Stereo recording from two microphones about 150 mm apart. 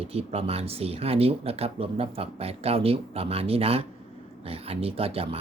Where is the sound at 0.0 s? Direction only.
40° right (ahead or behind).